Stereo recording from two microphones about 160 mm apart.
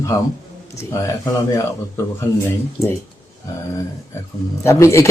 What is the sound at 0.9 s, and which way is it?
Speech, 20° left (ahead or behind).